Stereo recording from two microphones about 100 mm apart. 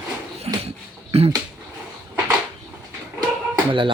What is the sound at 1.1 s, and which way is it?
Speech, 90° right.